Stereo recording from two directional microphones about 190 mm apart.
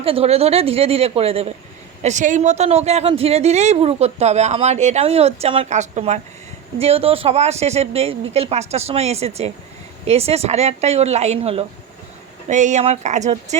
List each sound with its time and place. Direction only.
0.0 s speech: 30° right (ahead or behind)